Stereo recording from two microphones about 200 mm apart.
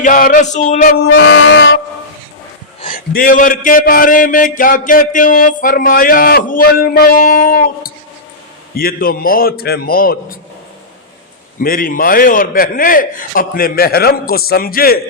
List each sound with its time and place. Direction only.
0.0 s male singing: 40° left (ahead or behind)
1.0 s music: 60° left (ahead or behind)
2.8 s a man's voice: 45° left (ahead or behind)
11.6 s a man's voice: 45° left (ahead or behind)